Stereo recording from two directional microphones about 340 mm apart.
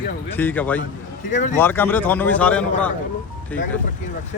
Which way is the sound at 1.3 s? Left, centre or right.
Left.